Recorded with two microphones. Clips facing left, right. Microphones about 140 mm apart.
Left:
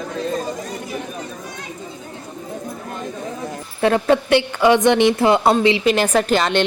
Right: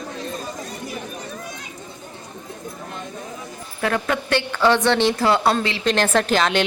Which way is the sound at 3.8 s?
25° left (ahead or behind).